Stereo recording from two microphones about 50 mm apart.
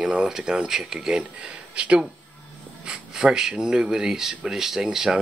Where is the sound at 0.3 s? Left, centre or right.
Centre.